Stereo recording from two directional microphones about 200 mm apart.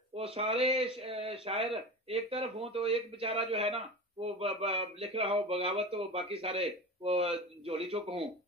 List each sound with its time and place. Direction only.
0.1 s speech: 30° right (ahead or behind)